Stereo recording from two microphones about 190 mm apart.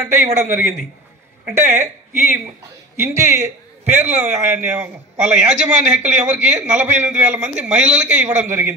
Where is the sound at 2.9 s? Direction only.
15° right (ahead or behind).